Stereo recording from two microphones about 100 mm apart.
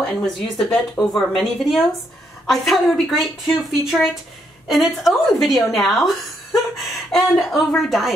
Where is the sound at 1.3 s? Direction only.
Centre (ahead or behind).